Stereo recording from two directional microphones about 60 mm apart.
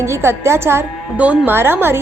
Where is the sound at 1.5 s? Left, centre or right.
Right.